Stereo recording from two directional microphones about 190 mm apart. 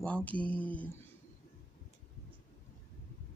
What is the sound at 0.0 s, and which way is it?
Speech, 5° left (ahead or behind).